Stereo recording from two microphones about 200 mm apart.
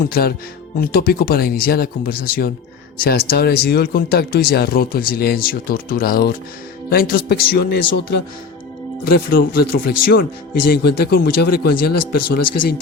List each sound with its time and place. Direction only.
0.0 s speech: 50° left (ahead or behind)